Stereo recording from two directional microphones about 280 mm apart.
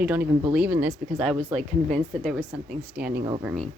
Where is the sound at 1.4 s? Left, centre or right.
Right.